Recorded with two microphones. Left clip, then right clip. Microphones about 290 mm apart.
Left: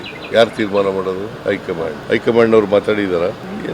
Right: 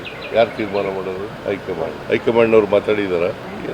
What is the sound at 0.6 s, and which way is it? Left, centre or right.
Speech, left.